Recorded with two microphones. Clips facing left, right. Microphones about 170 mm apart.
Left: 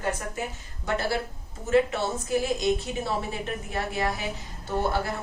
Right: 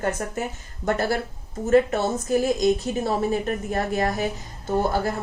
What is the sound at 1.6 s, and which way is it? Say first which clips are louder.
A woman's voice: right 4 dB; 45° right (ahead or behind).